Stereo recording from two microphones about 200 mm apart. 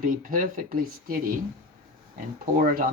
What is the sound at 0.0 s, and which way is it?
Speech, 45° right (ahead or behind).